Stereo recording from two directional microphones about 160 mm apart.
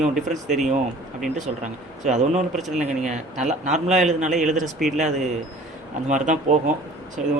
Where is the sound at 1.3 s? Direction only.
50° right (ahead or behind).